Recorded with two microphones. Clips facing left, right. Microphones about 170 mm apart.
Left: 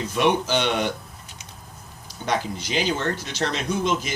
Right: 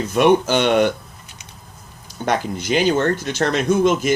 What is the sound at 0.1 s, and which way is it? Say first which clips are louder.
Speech: right 7 dB; 55° right (ahead or behind).